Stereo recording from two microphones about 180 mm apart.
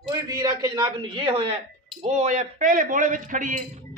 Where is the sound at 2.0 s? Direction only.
40° right (ahead or behind).